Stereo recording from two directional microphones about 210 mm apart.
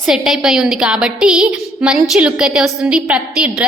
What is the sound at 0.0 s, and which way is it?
A woman's voice, centre (ahead or behind).